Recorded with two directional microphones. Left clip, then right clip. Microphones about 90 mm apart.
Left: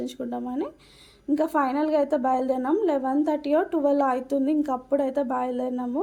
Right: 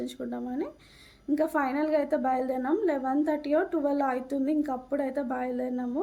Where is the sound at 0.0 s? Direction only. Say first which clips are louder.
Left 4 dB; 25° left (ahead or behind).